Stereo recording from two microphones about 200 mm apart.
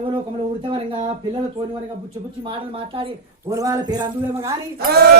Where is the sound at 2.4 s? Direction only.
25° right (ahead or behind).